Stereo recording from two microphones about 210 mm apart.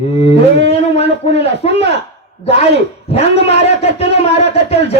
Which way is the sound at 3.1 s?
30° left (ahead or behind).